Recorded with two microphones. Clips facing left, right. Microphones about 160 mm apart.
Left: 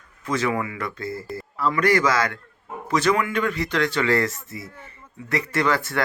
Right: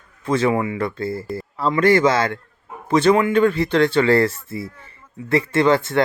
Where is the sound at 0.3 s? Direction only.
30° right (ahead or behind).